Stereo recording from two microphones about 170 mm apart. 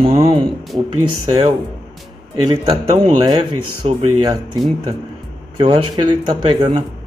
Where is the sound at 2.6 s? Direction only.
30° right (ahead or behind).